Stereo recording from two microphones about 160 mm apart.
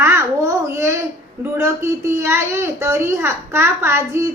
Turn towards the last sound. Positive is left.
turn(degrees=-15)  # may be behind; listen again after turning